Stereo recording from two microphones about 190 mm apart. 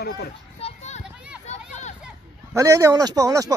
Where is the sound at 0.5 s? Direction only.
35° left (ahead or behind).